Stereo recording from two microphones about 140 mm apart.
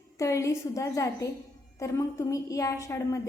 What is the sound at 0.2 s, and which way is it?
A woman's voice, 20° left (ahead or behind).